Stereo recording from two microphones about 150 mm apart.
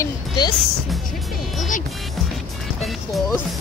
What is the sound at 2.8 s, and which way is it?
Music, centre (ahead or behind).